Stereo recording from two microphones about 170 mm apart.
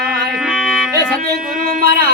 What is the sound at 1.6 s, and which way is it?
Speech, 60° right (ahead or behind).